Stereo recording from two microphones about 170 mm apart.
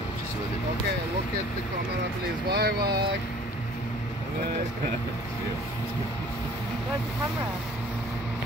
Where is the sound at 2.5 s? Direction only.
70° right (ahead or behind).